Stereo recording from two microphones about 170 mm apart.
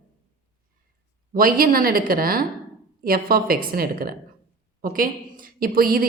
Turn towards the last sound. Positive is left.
turn(degrees=-60)  # may be behind; listen again after turning